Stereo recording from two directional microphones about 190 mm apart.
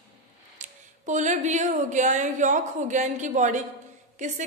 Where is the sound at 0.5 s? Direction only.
40° right (ahead or behind).